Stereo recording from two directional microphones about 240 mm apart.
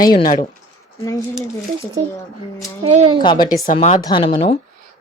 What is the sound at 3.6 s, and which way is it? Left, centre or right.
Speech, left.